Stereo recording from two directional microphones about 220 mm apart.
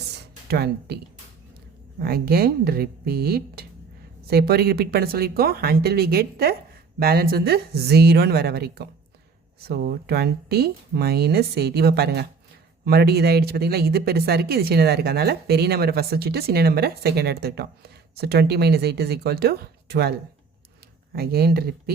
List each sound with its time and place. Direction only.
0.5 s speech: 45° right (ahead or behind)
2.0 s speech: 45° right (ahead or behind)
21.2 s speech: 45° right (ahead or behind)